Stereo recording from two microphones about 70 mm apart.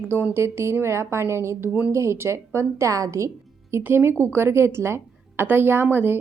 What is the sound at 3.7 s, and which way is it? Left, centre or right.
A woman's voice, right.